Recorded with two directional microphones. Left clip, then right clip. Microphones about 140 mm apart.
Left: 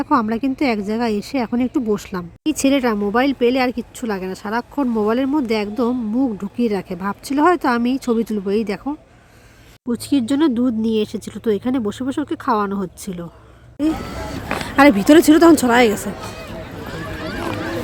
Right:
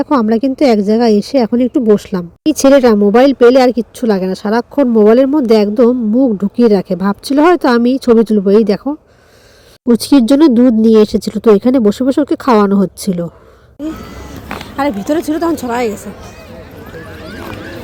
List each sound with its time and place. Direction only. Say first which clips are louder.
0.0 s speech: right 6 dB; 20° right (ahead or behind)
9.8 s speech: right 11 dB; 45° right (ahead or behind)
14.8 s speech: left 4 dB; 35° left (ahead or behind); by 16.1 s 20° left (ahead or behind)